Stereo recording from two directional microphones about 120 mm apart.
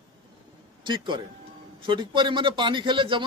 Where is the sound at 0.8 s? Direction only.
40° right (ahead or behind).